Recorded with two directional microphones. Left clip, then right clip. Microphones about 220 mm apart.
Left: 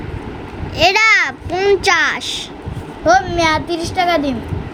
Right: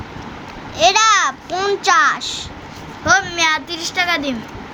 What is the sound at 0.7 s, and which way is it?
A child's voice, 5° left (ahead or behind).